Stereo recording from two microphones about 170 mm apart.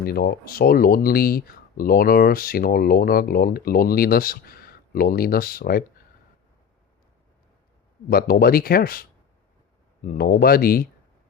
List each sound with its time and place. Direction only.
0.0 s speech: 65° left (ahead or behind)
8.1 s speech: 60° left (ahead or behind)
10.1 s speech: 65° left (ahead or behind)